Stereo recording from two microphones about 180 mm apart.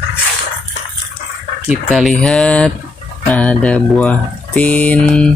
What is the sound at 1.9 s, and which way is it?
Speech, centre (ahead or behind).